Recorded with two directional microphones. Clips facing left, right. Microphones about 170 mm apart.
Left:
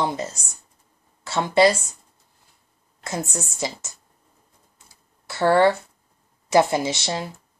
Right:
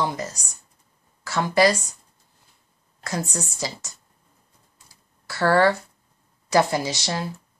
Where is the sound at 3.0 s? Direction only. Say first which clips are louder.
Even; 25° left (ahead or behind).